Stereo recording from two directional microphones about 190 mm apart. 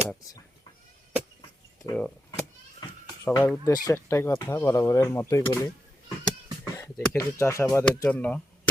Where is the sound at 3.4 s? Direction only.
10° left (ahead or behind).